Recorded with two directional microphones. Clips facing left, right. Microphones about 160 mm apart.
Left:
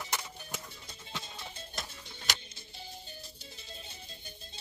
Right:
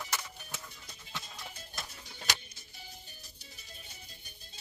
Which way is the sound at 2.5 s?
25° left (ahead or behind).